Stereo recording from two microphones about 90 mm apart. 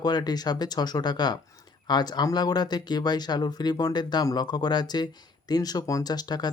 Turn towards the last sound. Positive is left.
turn(degrees=50)  # may be behind; listen again after turning